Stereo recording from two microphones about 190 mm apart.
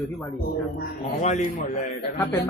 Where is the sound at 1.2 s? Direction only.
35° left (ahead or behind).